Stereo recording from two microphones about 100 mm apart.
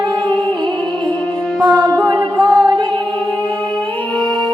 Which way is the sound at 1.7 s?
35° right (ahead or behind).